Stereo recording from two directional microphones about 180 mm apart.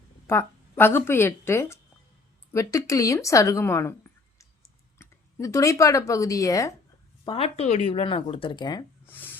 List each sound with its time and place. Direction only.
0.3 s a woman's voice: 15° left (ahead or behind)
4.4 s clicking: 15° left (ahead or behind)
7.3 s speech: 35° left (ahead or behind)
9.0 s a sound: 10° left (ahead or behind)